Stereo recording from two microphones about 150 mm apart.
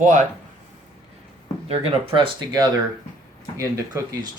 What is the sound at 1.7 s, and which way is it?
Speech, 35° right (ahead or behind).